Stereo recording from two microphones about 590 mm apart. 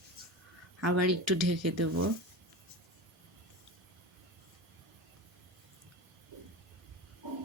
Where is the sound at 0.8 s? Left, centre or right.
Right.